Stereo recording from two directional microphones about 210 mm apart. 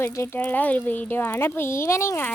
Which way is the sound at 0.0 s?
10° left (ahead or behind).